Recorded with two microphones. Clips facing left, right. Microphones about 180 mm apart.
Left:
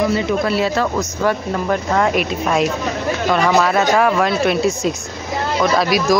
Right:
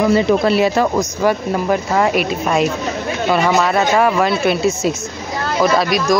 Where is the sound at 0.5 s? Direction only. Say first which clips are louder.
Right 3 dB; 15° right (ahead or behind).